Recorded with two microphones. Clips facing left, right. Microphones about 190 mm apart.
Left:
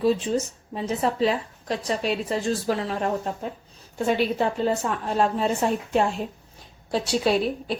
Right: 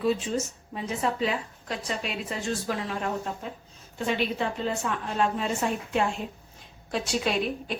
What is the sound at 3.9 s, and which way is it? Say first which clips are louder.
A woman's voice: left 5 dB; 40° left (ahead or behind).